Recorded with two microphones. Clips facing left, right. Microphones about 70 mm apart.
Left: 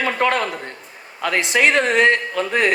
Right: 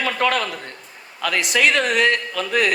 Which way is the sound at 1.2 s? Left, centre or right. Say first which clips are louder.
Left 2 dB; left.